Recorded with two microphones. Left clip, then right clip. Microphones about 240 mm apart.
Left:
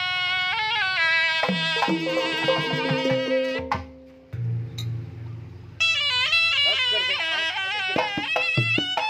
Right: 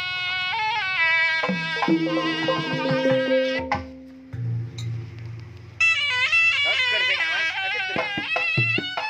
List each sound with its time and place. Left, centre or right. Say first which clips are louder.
0.0 s music: left 2 dB; left
5.8 s music: right 2 dB; left